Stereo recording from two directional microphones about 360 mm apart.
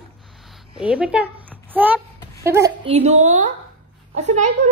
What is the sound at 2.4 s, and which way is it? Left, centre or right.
A woman's voice, centre.